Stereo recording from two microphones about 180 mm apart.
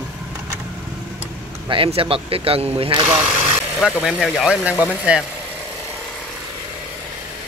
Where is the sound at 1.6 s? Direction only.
30° right (ahead or behind).